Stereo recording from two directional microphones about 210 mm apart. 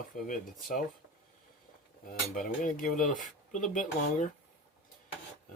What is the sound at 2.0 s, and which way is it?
Speech, 40° left (ahead or behind).